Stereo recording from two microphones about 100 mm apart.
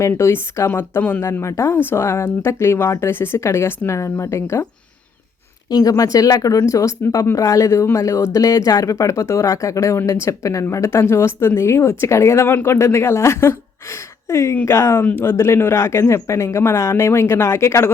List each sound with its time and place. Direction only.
0.1 s a woman's voice: 25° left (ahead or behind)
5.7 s a woman's voice: 35° left (ahead or behind)